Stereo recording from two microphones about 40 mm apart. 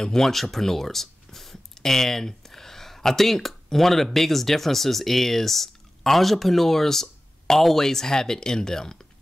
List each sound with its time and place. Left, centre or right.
0.0 s speech: centre
0.3 s speech: centre